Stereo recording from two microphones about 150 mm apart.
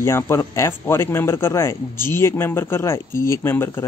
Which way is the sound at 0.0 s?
20° left (ahead or behind).